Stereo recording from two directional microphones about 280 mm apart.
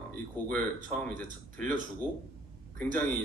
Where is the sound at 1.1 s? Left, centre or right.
Right.